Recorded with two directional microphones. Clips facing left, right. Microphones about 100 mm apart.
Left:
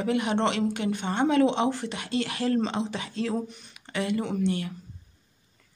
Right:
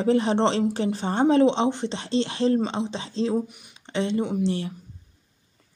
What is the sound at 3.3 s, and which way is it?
Speech, 10° right (ahead or behind).